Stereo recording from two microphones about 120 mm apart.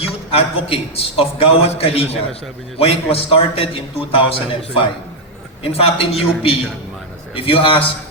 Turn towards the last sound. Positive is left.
turn(degrees=50)  # may be behind; listen again after turning